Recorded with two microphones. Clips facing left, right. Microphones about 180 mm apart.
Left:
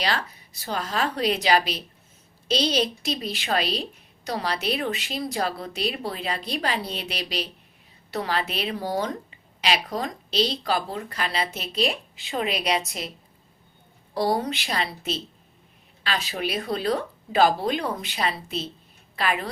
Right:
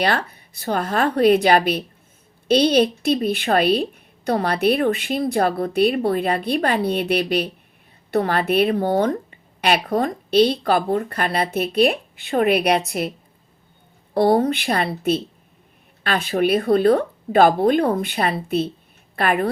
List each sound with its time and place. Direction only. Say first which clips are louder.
0.0 s a woman's voice: right 6 dB; 55° right (ahead or behind)